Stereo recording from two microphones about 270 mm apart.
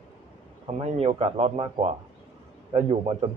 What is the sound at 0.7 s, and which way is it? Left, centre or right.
Speech, right.